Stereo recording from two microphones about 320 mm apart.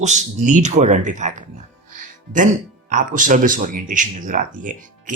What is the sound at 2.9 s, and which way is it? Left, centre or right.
Speech, right.